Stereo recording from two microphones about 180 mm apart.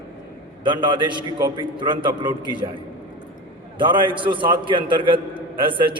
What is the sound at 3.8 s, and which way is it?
A man's voice, 25° right (ahead or behind).